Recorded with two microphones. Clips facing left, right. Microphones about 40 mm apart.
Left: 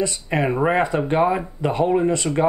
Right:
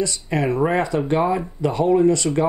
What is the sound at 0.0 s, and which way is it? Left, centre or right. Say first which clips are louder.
Speech: even; left.